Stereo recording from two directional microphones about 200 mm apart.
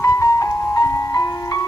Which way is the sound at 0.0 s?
15° left (ahead or behind).